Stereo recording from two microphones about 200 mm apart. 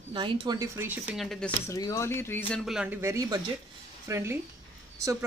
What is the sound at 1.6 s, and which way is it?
Speech, 15° left (ahead or behind).